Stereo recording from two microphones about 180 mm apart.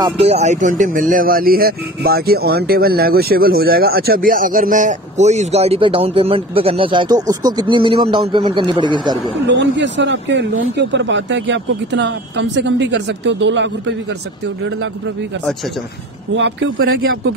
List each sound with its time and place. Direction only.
0.2 s speech: 35° right (ahead or behind)
9.5 s speech: 80° right